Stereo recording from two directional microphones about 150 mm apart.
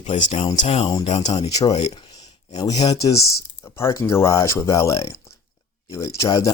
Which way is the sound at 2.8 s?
25° left (ahead or behind).